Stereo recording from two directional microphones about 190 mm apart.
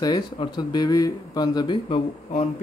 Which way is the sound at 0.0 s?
20° left (ahead or behind).